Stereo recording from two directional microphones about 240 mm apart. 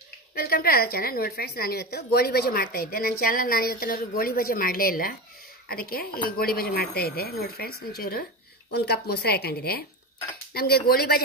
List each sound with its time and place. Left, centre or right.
0.3 s a woman's voice: left